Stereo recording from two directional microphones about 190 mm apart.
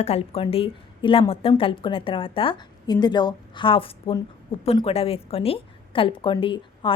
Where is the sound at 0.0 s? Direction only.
30° left (ahead or behind).